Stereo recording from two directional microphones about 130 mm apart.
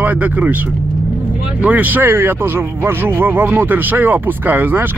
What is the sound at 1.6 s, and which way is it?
Speech, 10° right (ahead or behind).